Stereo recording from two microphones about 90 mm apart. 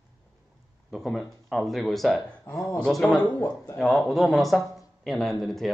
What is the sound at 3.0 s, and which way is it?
Speech, 15° left (ahead or behind).